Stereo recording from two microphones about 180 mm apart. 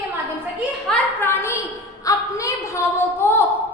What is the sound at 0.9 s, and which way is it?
A woman's voice, 15° left (ahead or behind).